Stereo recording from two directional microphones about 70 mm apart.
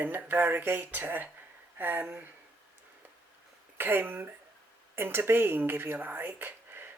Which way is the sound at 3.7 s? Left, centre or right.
Right.